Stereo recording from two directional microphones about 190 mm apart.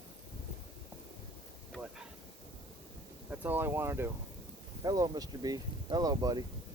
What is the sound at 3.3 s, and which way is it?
Speech, 10° right (ahead or behind).